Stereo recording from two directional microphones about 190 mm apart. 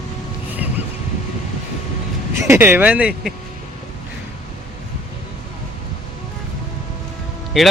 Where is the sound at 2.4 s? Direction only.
15° right (ahead or behind).